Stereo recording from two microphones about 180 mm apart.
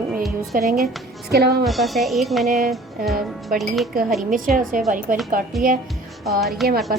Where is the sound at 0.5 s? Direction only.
50° right (ahead or behind).